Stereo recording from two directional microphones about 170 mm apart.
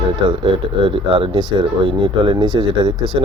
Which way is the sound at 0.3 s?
30° right (ahead or behind).